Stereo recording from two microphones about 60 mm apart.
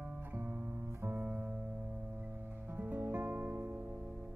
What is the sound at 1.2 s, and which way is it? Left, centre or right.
Music, centre.